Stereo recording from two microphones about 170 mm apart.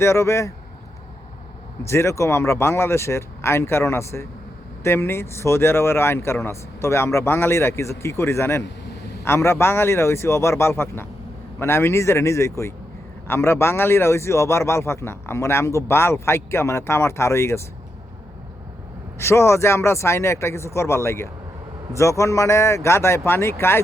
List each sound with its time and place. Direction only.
0.0 s a man's voice: 15° left (ahead or behind)
1.9 s a man's voice: 15° left (ahead or behind)
19.2 s a man's voice: 15° left (ahead or behind)